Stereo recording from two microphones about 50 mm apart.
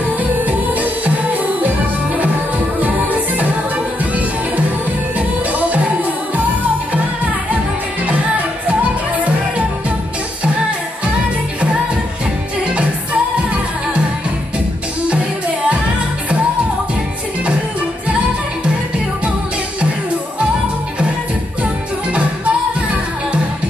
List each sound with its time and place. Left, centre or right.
0.2 s music: right
2.8 s music: right
22.1 s music: right